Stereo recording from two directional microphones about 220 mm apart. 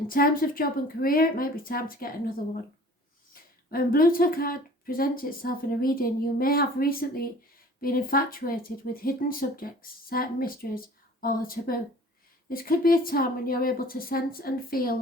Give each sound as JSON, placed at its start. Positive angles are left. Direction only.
{"t": 0.1, "sound": "speech", "side_deg": 40}
{"t": 3.7, "sound": "speech", "side_deg": 40}